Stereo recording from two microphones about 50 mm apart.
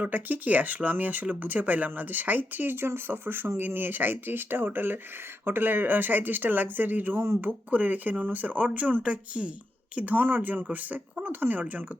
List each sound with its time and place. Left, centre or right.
0.0 s speech: right